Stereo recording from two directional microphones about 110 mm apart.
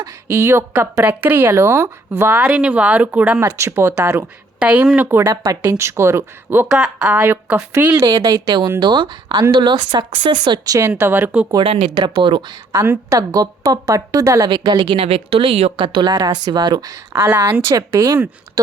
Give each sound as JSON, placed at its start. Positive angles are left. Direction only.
{"t": 0.0, "sound": "speech", "side_deg": -25}
{"t": 2.4, "sound": "speech", "side_deg": -10}
{"t": 6.7, "sound": "speech", "side_deg": -5}
{"t": 8.0, "sound": "a woman's voice", "side_deg": -35}
{"t": 10.8, "sound": "speech", "side_deg": -25}
{"t": 11.9, "sound": "speech", "side_deg": -40}
{"t": 12.7, "sound": "a woman's voice", "side_deg": -25}
{"t": 15.0, "sound": "speech", "side_deg": -60}
{"t": 15.8, "sound": "a woman's voice", "side_deg": -45}